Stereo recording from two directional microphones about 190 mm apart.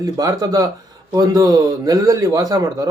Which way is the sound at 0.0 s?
20° right (ahead or behind).